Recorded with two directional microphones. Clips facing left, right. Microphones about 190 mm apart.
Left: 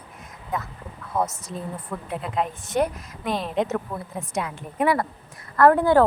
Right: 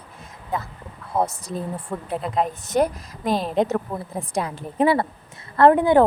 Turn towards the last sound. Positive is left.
turn(degrees=-20)  # may be behind; listen again after turning